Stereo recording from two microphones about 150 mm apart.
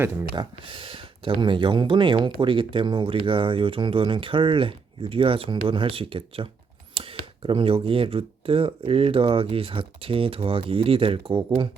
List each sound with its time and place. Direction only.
0.0 s speech: 15° right (ahead or behind)
0.3 s speech: 35° right (ahead or behind)